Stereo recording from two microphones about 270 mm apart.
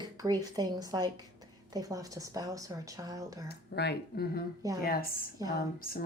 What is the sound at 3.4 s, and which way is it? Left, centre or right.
Speech, left.